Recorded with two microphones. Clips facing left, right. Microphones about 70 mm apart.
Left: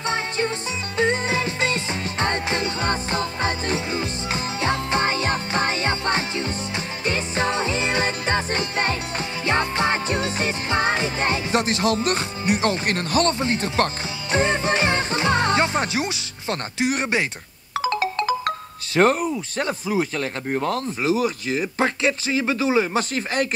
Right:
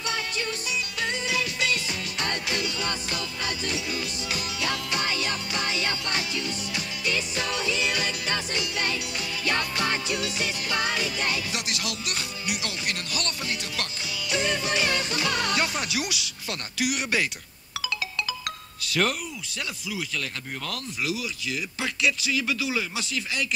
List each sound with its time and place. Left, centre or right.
0.0 s music: left
17.7 s ringtone: left
18.9 s speech: left